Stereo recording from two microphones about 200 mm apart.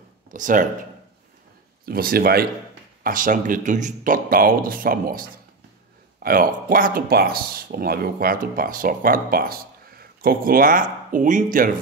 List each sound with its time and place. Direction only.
0.3 s speech: 40° right (ahead or behind)
1.9 s speech: 45° right (ahead or behind)
6.2 s speech: 45° right (ahead or behind)